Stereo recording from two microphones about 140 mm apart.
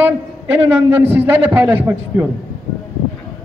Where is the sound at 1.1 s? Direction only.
15° right (ahead or behind).